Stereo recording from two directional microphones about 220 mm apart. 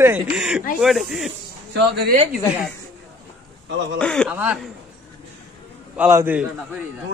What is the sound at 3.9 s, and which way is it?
Speech, 5° left (ahead or behind).